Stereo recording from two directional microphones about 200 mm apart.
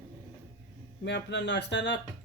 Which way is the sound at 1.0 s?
60° left (ahead or behind).